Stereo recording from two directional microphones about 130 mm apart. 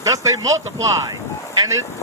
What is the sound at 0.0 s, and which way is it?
Speech, 25° right (ahead or behind).